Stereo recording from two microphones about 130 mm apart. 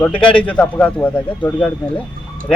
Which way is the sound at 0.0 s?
10° left (ahead or behind).